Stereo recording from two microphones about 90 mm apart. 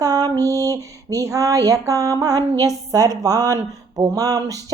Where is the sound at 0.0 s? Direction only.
45° right (ahead or behind).